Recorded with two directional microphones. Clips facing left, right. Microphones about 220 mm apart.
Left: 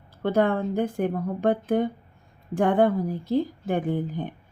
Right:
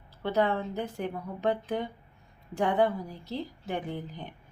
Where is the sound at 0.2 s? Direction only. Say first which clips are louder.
Left 5 dB; 50° left (ahead or behind).